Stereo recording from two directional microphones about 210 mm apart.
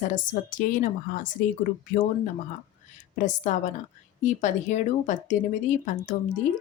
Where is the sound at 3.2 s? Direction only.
35° left (ahead or behind).